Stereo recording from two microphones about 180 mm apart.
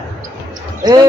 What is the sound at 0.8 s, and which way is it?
Speech, 20° right (ahead or behind).